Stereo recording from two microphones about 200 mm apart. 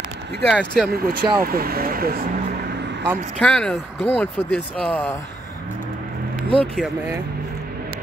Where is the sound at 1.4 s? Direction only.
50° right (ahead or behind).